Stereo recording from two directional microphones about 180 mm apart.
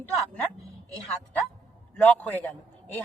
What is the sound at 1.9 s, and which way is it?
A man's voice, 10° left (ahead or behind).